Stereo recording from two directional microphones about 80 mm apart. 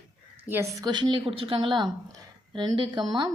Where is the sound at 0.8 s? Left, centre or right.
Right.